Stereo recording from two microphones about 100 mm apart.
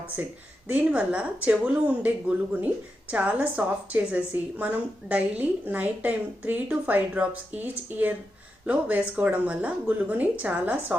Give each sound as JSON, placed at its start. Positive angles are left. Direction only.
{"t": 0.7, "sound": "a woman's voice", "side_deg": -10}